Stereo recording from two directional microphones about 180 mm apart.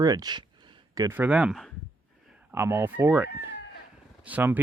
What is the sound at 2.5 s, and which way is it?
Speech, 15° right (ahead or behind).